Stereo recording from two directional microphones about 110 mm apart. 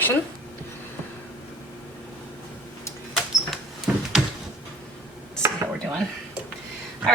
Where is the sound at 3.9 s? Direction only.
5° right (ahead or behind).